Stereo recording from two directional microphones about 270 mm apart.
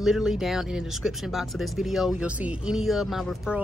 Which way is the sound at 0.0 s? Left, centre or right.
Centre.